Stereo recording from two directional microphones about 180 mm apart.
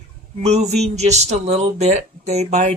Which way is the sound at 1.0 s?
40° right (ahead or behind).